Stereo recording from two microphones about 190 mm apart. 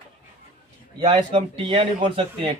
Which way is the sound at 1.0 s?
30° right (ahead or behind).